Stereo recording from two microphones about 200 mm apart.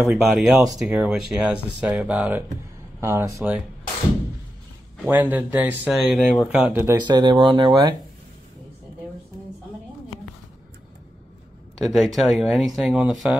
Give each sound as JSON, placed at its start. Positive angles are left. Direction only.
{"t": 0.0, "sound": "speech", "side_deg": 0}
{"t": 5.1, "sound": "speech", "side_deg": -10}
{"t": 7.0, "sound": "speech", "side_deg": -20}
{"t": 11.8, "sound": "speech", "side_deg": 0}